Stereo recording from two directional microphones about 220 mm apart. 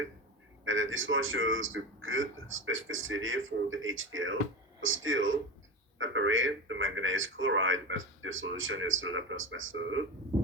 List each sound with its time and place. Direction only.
0.6 s speech: 60° right (ahead or behind)